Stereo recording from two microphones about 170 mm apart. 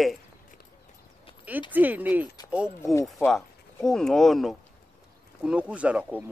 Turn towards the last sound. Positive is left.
turn(degrees=-5)  # may be behind; listen again after turning